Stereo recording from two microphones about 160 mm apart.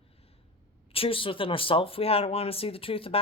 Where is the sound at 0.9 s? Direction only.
35° left (ahead or behind).